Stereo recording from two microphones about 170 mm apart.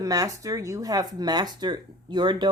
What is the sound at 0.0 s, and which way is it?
Speech, 20° right (ahead or behind).